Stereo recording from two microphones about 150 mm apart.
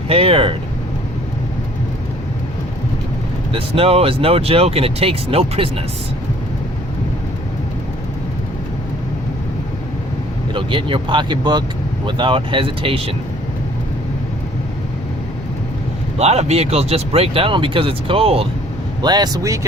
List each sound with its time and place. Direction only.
0.1 s speech: 40° right (ahead or behind)
3.5 s speech: 40° right (ahead or behind)
10.5 s speech: 35° right (ahead or behind)
16.1 s speech: 45° right (ahead or behind)
19.0 s speech: 30° right (ahead or behind)